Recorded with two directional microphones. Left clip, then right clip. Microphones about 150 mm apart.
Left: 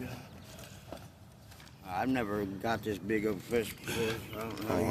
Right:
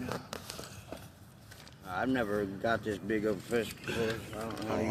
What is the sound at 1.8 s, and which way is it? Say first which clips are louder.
Speech: right 1 dB; 45° left (ahead or behind).